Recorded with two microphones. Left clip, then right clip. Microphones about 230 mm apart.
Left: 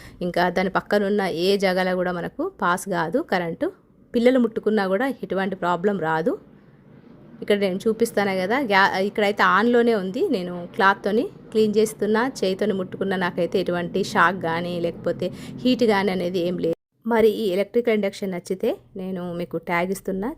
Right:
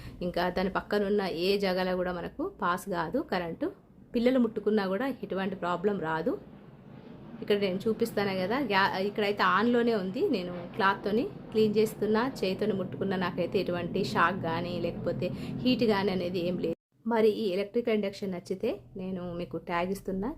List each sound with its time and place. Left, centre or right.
0.2 s a woman's voice: left
7.4 s a woman's voice: left